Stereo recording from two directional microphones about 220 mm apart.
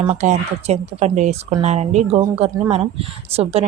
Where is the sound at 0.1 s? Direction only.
30° right (ahead or behind).